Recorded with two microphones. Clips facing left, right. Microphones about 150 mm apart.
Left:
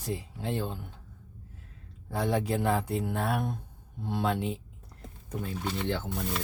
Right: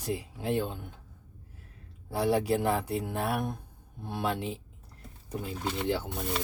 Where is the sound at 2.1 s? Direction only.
5° right (ahead or behind).